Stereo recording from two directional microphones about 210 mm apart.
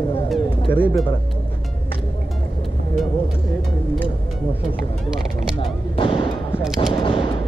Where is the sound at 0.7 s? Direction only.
10° left (ahead or behind).